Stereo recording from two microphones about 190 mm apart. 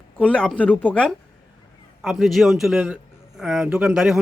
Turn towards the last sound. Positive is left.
turn(degrees=-5)  # may be behind; listen again after turning